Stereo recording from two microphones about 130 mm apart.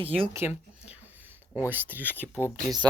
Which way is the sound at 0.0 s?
45° right (ahead or behind).